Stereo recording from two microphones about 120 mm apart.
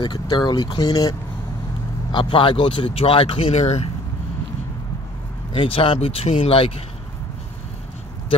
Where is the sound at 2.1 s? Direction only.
45° left (ahead or behind); by 3.9 s 60° left (ahead or behind).